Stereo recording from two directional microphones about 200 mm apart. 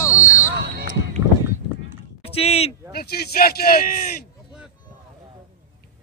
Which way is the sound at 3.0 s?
50° left (ahead or behind).